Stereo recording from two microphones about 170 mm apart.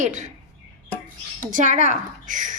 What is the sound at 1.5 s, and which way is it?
A woman's voice, 45° right (ahead or behind).